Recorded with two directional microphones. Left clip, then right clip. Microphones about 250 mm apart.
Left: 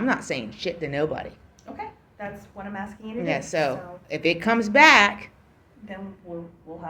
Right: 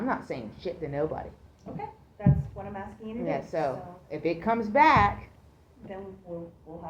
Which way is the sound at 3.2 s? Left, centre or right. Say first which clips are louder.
Left 5 dB; left.